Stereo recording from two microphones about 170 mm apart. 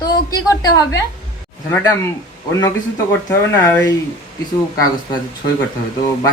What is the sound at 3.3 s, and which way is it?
Speech, 10° left (ahead or behind).